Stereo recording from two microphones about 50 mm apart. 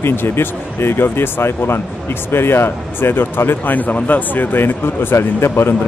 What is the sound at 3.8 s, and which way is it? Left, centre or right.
Speech, left.